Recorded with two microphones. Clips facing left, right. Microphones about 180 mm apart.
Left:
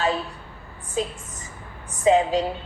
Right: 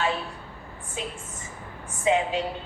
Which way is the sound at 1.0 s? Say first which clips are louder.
Left 8 dB; 35° left (ahead or behind).